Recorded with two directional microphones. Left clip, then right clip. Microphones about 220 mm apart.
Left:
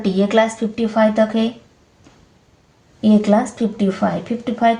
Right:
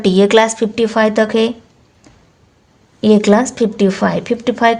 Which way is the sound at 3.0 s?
45° right (ahead or behind).